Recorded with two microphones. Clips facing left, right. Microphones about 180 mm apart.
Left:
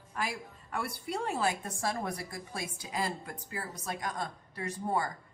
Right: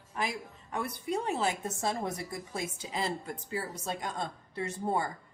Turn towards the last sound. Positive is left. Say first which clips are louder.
# right 1 dB
turn(degrees=-25)  # may be behind; listen again after turning